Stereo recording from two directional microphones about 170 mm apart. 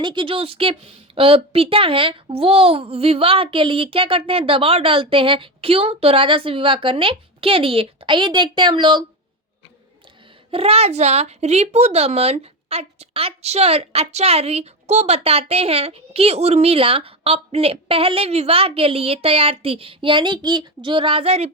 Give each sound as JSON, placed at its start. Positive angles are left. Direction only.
{"t": 0.0, "sound": "a child's voice", "side_deg": -30}
{"t": 10.5, "sound": "a child's voice", "side_deg": -35}